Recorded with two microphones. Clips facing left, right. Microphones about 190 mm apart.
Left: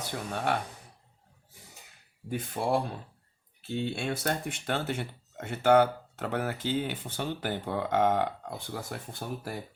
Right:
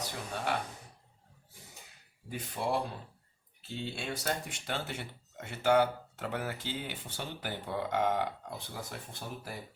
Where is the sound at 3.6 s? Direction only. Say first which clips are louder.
Left 7 dB; 60° left (ahead or behind).